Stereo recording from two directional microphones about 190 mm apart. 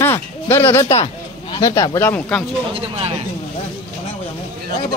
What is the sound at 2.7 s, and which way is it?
Speech, 30° right (ahead or behind).